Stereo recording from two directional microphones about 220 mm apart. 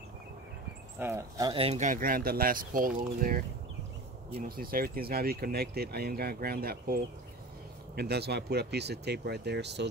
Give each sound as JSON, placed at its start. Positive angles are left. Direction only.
{"t": 0.9, "sound": "speech", "side_deg": -10}